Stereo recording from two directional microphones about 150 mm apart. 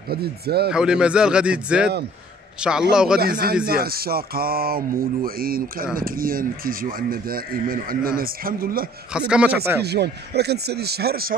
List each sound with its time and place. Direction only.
0.1 s speech: 90° right
0.7 s a man's voice: 5° right (ahead or behind)
3.2 s speech: 90° right; by 8.8 s 75° right (ahead or behind)
9.3 s a man's voice: 10° right (ahead or behind)
9.8 s speech: 90° right